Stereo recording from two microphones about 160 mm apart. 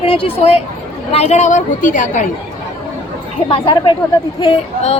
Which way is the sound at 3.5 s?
25° left (ahead or behind).